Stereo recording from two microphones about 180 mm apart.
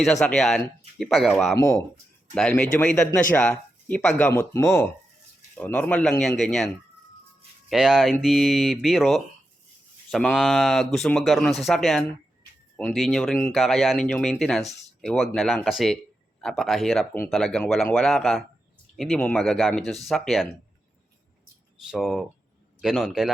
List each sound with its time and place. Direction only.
0.0 s speech: centre (ahead or behind)
1.5 s speech: 15° left (ahead or behind)
2.3 s speech: 5° left (ahead or behind)
4.3 s speech: 15° left (ahead or behind)
4.6 s speech: centre (ahead or behind)
7.7 s speech: centre (ahead or behind)
21.8 s speech: centre (ahead or behind)